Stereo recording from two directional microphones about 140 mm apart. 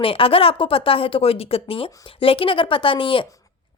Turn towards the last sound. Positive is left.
turn(degrees=40)  # may be behind; listen again after turning